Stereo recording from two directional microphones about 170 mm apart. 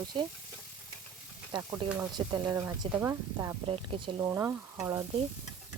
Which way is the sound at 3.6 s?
35° right (ahead or behind).